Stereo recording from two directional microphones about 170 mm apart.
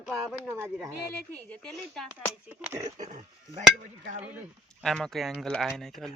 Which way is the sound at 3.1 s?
45° right (ahead or behind).